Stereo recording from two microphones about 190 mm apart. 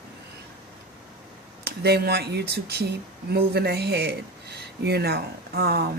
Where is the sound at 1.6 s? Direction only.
55° right (ahead or behind).